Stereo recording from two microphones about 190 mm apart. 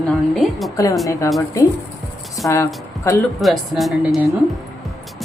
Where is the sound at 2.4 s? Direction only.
15° left (ahead or behind).